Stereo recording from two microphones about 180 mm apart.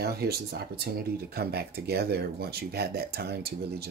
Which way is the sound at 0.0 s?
60° right (ahead or behind).